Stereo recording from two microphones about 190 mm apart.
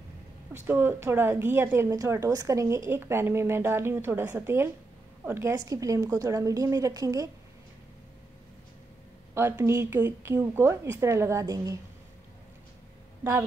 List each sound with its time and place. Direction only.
0.5 s a woman's voice: 10° right (ahead or behind)
9.3 s a woman's voice: 15° right (ahead or behind)